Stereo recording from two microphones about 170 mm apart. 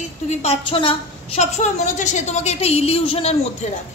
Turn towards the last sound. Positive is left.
turn(degrees=35)  # may be behind; listen again after turning